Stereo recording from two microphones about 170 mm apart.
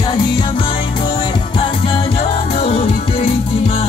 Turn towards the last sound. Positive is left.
turn(degrees=35)  # may be behind; listen again after turning